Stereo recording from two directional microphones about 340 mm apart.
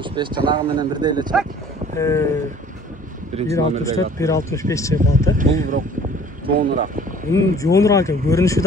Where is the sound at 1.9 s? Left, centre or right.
Centre.